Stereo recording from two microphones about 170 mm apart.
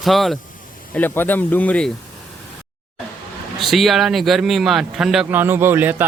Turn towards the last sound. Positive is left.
turn(degrees=-10)  # may be behind; listen again after turning